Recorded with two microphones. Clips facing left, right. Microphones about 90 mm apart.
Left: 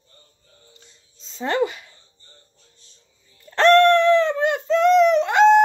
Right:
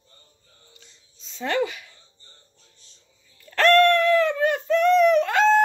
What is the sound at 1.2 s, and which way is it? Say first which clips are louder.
Speech: left 3 dB; 30° left (ahead or behind).